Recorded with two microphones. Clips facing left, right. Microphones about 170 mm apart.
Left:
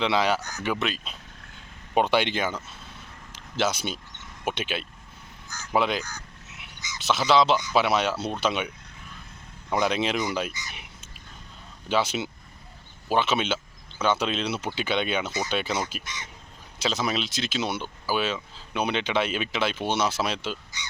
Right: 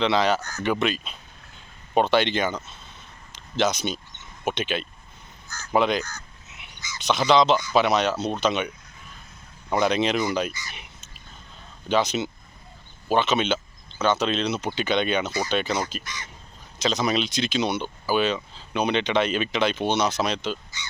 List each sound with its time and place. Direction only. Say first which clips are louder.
0.0 s speech: right 2 dB; 10° left (ahead or behind)
0.7 s speech: right 4 dB; centre (ahead or behind)
2.0 s speech: right 2 dB; 10° left (ahead or behind)
5.5 s a sound: right 3 dB; 10° left (ahead or behind)
7.7 s speech: right 2 dB; 5° left (ahead or behind)
10.5 s speech: right 1 dB; 20° left (ahead or behind)
11.9 s speech: right 3 dB; 5° left (ahead or behind)